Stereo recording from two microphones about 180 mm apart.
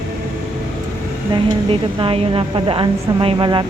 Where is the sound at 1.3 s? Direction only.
30° right (ahead or behind).